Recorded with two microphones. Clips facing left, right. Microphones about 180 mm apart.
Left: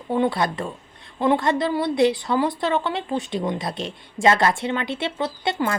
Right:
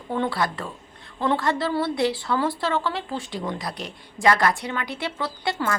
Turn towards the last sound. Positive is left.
turn(degrees=25)  # may be behind; listen again after turning